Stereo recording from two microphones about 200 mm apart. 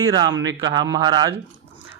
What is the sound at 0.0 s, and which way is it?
A man's voice, 20° right (ahead or behind).